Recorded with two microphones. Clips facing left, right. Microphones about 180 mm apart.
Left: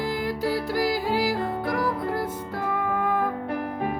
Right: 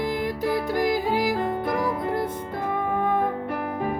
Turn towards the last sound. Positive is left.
turn(degrees=-25)  # may be behind; listen again after turning